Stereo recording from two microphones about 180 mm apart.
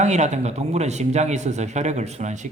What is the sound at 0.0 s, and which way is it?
Speech, 40° right (ahead or behind).